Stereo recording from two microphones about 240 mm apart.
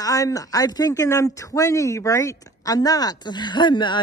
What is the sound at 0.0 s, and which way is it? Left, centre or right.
Speech, centre.